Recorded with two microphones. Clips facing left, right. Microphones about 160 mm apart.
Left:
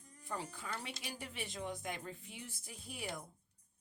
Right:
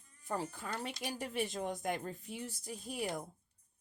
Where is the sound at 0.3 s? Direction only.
45° right (ahead or behind).